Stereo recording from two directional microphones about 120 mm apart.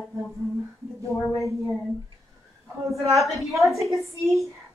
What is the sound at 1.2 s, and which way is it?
Speech, 25° left (ahead or behind).